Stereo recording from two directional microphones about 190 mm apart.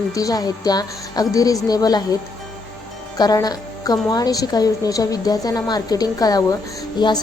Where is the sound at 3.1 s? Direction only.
20° left (ahead or behind).